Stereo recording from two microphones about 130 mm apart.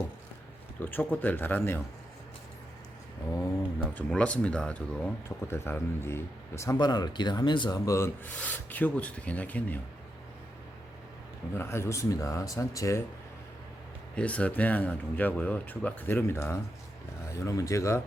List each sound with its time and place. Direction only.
0.8 s speech: 15° left (ahead or behind)
3.9 s speech: 10° left (ahead or behind)
5.5 s speech: 20° left (ahead or behind)
6.7 s speech: 30° left (ahead or behind)
7.9 s speech: 20° left (ahead or behind)
11.5 s speech: 20° left (ahead or behind)
14.2 s speech: 10° left (ahead or behind)